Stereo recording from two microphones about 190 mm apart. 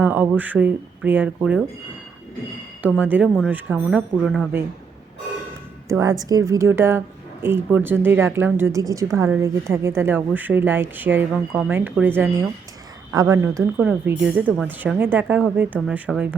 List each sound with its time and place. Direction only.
0.0 s speech: 10° right (ahead or behind)
3.0 s speech: 10° right (ahead or behind)
5.9 s speech: 15° right (ahead or behind)